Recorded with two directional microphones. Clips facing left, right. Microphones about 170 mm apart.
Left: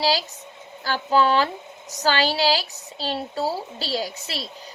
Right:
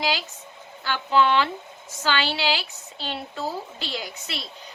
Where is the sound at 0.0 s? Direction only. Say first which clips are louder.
Left 4 dB; 35° left (ahead or behind).